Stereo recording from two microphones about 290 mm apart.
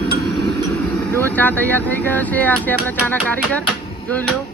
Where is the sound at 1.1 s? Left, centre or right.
Centre.